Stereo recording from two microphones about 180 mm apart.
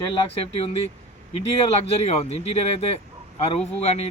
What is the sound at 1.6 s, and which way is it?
Speech, 35° left (ahead or behind).